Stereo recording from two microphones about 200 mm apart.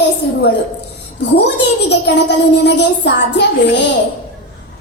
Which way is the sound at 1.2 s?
60° left (ahead or behind).